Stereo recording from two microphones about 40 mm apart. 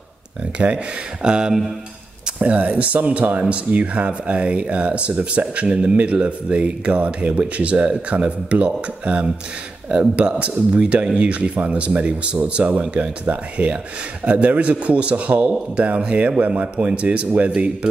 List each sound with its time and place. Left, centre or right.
1.2 s a sound: right
2.3 s speech: right
13.6 s speech: right
14.2 s speech: right